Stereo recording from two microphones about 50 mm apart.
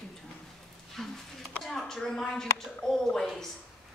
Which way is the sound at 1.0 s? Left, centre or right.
Centre.